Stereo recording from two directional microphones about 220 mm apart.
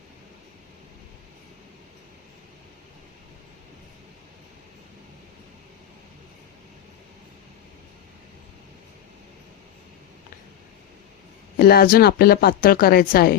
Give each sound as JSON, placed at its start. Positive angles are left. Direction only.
{"t": 11.5, "sound": "speech", "side_deg": 45}